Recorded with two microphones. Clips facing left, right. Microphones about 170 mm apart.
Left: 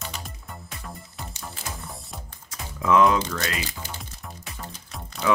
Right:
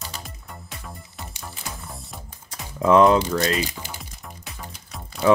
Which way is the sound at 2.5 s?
30° right (ahead or behind).